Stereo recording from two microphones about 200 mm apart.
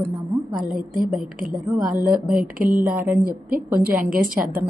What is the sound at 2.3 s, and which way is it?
Speech, 45° right (ahead or behind).